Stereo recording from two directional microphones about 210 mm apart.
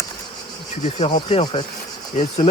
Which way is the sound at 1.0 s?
25° left (ahead or behind).